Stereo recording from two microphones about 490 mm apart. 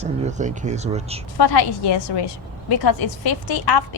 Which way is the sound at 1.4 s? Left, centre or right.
Left.